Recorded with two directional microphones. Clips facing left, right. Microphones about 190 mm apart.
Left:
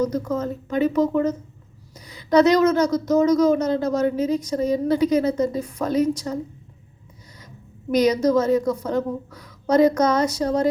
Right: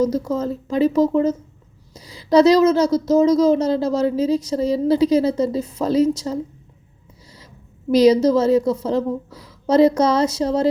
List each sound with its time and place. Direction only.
0.0 s speech: 30° right (ahead or behind)
7.9 s speech: 30° right (ahead or behind)